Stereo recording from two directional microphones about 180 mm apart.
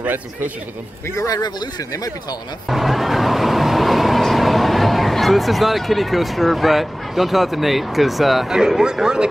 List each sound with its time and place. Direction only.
0.0 s a man's voice: 10° right (ahead or behind)
1.1 s speech: 20° left (ahead or behind)
2.7 s speech: centre (ahead or behind)